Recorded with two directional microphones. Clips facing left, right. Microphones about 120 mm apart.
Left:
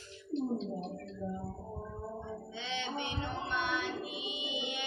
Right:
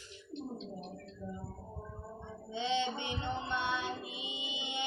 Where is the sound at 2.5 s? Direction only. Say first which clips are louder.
Right 8 dB; 25° right (ahead or behind).